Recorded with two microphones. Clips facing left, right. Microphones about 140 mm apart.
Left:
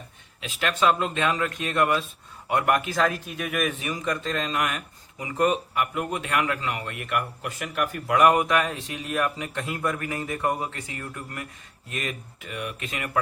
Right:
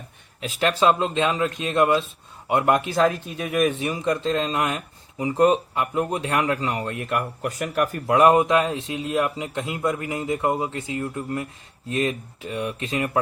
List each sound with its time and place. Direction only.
0.3 s a man's voice: 35° right (ahead or behind)